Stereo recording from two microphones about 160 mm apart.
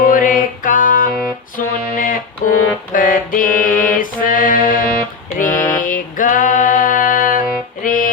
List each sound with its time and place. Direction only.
0.0 s music: 60° left (ahead or behind)
1.5 s mantra: 60° left (ahead or behind)
5.4 s a sound: 55° left (ahead or behind)
7.9 s music: 60° left (ahead or behind)